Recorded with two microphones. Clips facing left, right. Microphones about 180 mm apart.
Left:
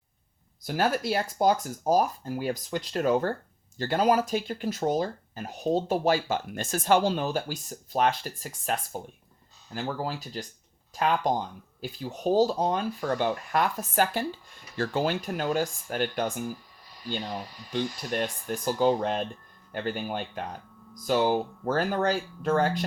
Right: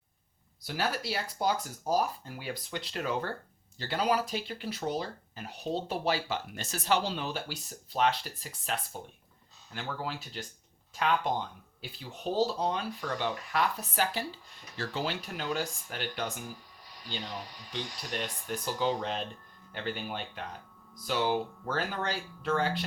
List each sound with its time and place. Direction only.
0.6 s speech: 50° left (ahead or behind)
17.7 s speech: 50° left (ahead or behind)